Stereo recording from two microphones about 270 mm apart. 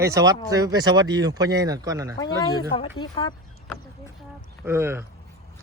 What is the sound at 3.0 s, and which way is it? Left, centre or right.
Speech, centre.